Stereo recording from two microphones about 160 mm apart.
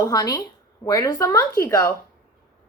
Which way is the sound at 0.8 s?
20° left (ahead or behind).